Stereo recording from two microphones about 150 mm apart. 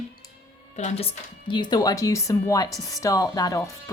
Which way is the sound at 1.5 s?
30° left (ahead or behind).